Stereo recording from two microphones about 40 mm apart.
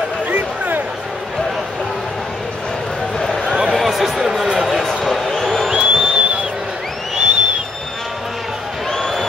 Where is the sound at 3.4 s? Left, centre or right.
Right.